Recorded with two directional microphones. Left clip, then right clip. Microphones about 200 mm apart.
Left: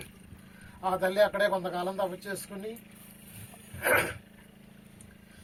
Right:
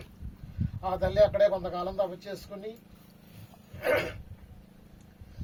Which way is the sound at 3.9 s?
20° right (ahead or behind).